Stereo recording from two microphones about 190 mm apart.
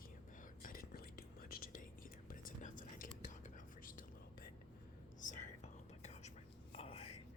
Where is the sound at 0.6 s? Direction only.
50° left (ahead or behind).